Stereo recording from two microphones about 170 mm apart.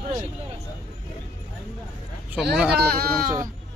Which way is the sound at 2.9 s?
60° right (ahead or behind).